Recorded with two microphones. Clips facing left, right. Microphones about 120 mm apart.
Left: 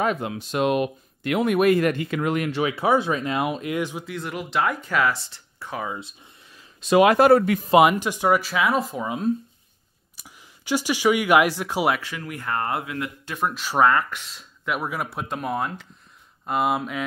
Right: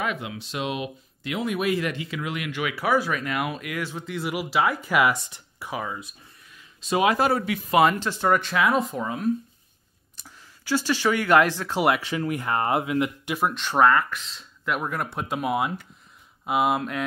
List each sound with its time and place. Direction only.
0.0 s speech: 40° left (ahead or behind); by 4.0 s 20° left (ahead or behind)
4.0 s speech: 5° right (ahead or behind)
5.9 s a sound: 25° left (ahead or behind)
6.8 s speech: 70° left (ahead or behind)
7.8 s speech: 15° left (ahead or behind)
10.1 s speech: 15° left (ahead or behind)
12.0 s speech: 25° right (ahead or behind)
13.4 s speech: centre (ahead or behind)